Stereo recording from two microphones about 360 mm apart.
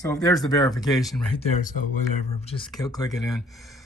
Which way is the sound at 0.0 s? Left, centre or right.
Centre.